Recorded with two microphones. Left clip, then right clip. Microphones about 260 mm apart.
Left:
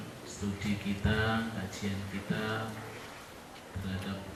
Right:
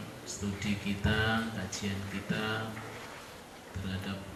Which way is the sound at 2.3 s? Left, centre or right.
Centre.